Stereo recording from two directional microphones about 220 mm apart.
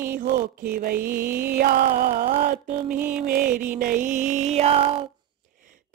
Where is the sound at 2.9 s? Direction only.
5° right (ahead or behind).